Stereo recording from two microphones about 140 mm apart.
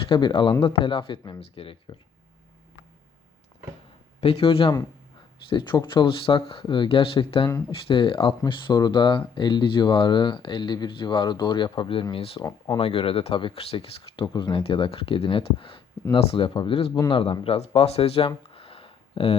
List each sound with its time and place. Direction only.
0.1 s speech: 35° left (ahead or behind)
4.2 s speech: 40° left (ahead or behind)
12.5 s speech: 25° left (ahead or behind)
12.8 s speech: 40° left (ahead or behind)
18.5 s a sound: 40° left (ahead or behind)